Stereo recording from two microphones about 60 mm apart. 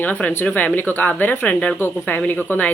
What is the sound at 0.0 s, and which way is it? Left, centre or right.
Speech, left.